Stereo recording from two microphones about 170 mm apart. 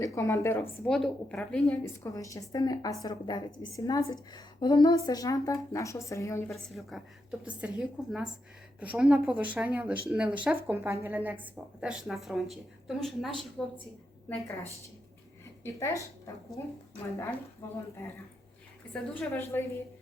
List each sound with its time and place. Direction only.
0.0 s a woman's voice: 15° left (ahead or behind)
0.9 s a woman's voice: centre (ahead or behind)
2.0 s a woman's voice: 20° left (ahead or behind)
6.5 s a woman's voice: centre (ahead or behind)
18.9 s a woman's voice: 5° left (ahead or behind)